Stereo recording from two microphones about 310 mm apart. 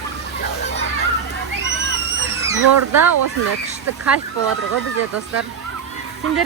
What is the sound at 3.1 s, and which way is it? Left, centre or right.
Speech, right.